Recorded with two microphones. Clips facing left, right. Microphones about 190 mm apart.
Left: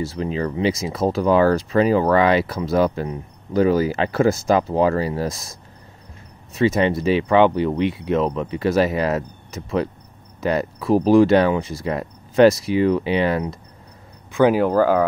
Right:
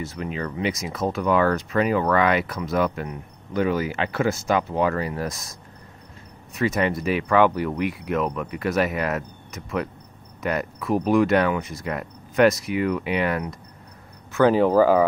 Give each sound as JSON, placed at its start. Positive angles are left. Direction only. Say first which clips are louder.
{"t": 0.0, "sound": "speech", "louder": "left 6 dB", "side_deg": 30}
{"t": 14.3, "sound": "speech", "louder": "left 2 dB", "side_deg": 15}
{"t": 14.6, "sound": "speech", "louder": "even", "side_deg": 0}